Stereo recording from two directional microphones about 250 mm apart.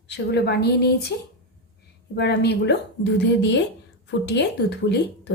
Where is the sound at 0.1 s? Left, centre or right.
Left.